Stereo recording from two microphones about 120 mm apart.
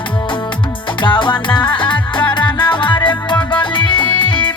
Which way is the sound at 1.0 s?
45° left (ahead or behind).